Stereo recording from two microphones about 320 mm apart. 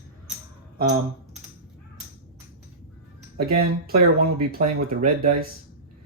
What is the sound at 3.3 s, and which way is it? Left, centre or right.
Speech, right.